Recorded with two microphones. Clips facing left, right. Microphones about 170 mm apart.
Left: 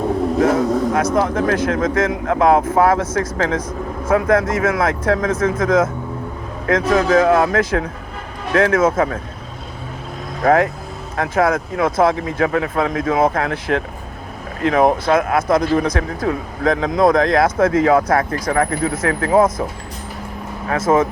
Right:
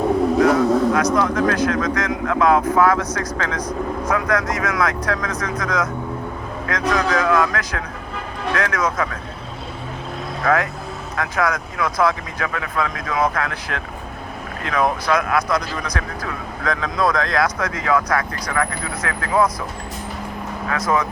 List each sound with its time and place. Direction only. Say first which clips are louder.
0.3 s speech: left 1 dB; 25° left (ahead or behind)
6.9 s speech: left 5 dB; 25° left (ahead or behind)
10.4 s speech: left 5 dB; 30° left (ahead or behind)
20.7 s speech: left 6 dB; 25° left (ahead or behind)